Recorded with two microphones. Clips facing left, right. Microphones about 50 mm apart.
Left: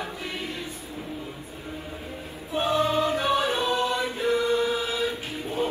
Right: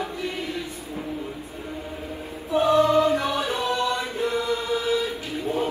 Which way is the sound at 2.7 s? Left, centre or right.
Right.